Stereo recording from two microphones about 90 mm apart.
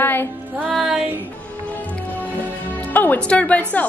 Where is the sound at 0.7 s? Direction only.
10° right (ahead or behind).